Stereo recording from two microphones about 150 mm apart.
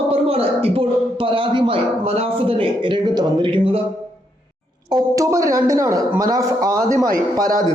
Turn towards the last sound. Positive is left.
turn(degrees=-25)  # may be behind; listen again after turning